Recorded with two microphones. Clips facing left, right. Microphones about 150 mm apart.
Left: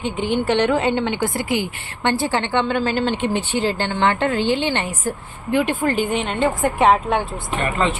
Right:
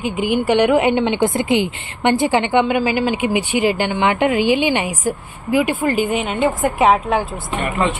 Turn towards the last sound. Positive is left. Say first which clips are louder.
# right 1 dB
turn(degrees=-15)  # may be behind; listen again after turning